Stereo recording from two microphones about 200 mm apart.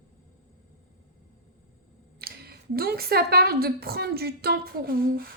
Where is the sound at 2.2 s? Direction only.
50° right (ahead or behind).